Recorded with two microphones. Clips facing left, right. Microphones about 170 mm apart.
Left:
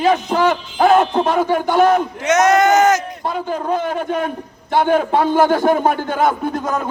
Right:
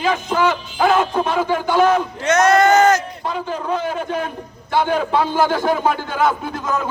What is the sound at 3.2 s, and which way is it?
A man's voice, 45° left (ahead or behind).